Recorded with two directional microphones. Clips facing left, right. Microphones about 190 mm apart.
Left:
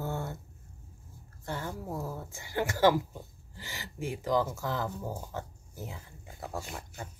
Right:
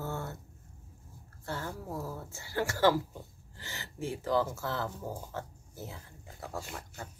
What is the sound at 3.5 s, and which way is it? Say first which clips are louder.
Speech: left 2 dB; 15° left (ahead or behind).